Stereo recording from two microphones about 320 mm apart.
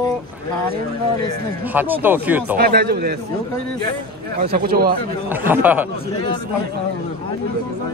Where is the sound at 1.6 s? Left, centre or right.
Centre.